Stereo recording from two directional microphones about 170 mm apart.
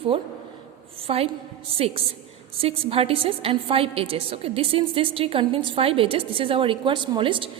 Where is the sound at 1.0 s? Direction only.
35° right (ahead or behind).